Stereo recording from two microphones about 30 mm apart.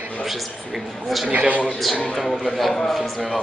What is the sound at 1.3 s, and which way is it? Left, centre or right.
Speech, right.